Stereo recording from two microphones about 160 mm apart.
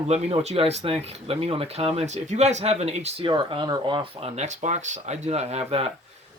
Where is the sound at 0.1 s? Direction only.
40° right (ahead or behind).